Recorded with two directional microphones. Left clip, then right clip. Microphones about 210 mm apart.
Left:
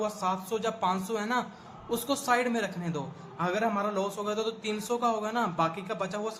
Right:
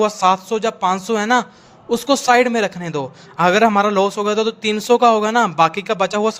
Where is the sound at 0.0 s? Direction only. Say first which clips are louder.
Right 15 dB; 45° right (ahead or behind).